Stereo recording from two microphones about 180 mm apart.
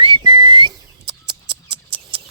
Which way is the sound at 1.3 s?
25° right (ahead or behind).